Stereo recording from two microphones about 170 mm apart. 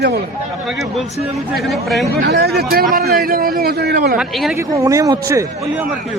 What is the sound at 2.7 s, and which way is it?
A man's voice, 60° right (ahead or behind).